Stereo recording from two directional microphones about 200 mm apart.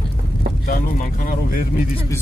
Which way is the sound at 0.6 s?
45° left (ahead or behind).